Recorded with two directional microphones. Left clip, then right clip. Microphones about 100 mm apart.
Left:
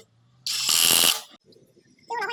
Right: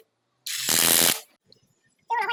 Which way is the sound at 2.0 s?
10° right (ahead or behind).